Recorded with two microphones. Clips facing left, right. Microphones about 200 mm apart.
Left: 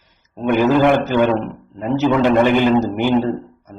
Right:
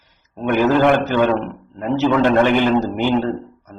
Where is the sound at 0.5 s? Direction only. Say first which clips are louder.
Left 1 dB; 15° left (ahead or behind).